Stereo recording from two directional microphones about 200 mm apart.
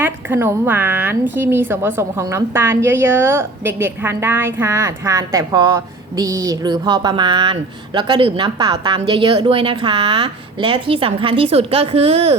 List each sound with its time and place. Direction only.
0.0 s a woman's voice: 10° right (ahead or behind); by 12.4 s 30° right (ahead or behind)